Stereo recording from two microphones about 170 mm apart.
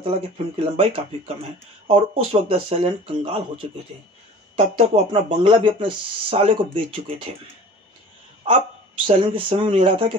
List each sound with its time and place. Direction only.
0.0 s speech: 35° right (ahead or behind)
4.6 s speech: 35° right (ahead or behind)
9.0 s speech: 30° right (ahead or behind)